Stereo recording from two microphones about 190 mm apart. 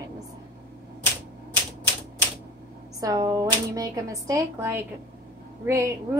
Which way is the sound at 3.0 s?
20° right (ahead or behind).